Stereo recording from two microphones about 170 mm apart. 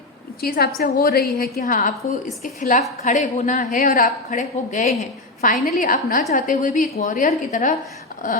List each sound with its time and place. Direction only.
0.4 s a woman's voice: 65° left (ahead or behind); by 4.9 s 45° left (ahead or behind)
5.4 s a woman's voice: 60° left (ahead or behind)